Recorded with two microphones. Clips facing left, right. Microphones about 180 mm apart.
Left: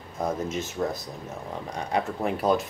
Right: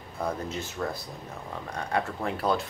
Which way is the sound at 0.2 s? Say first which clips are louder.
Left 3 dB; 20° left (ahead or behind).